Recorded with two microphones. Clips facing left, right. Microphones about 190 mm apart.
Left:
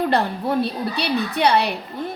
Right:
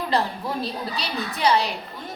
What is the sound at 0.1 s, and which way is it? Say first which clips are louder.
A woman's voice: left 4 dB; 60° left (ahead or behind).